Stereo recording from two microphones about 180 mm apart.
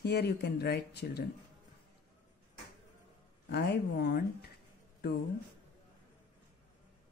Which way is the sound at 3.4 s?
70° left (ahead or behind).